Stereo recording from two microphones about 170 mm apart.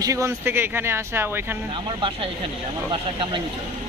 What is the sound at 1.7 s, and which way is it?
Speech, 30° right (ahead or behind).